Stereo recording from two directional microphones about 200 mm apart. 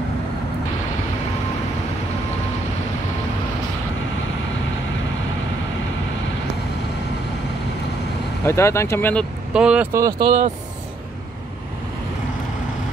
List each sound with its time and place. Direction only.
8.5 s speech: 15° left (ahead or behind)
9.5 s speech: 5° right (ahead or behind)
9.9 s speech: 20° right (ahead or behind)